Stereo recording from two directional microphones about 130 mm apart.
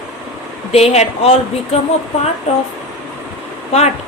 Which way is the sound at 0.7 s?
55° left (ahead or behind).